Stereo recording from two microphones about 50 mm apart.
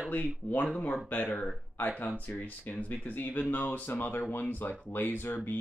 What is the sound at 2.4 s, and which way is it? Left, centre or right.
Speech, left.